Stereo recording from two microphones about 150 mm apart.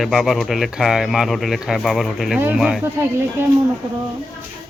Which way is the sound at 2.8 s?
15° right (ahead or behind).